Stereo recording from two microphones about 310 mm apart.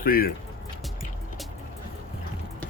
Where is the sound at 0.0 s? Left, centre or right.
Left.